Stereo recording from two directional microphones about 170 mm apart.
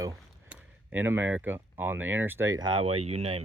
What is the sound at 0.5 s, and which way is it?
Speech, 10° right (ahead or behind).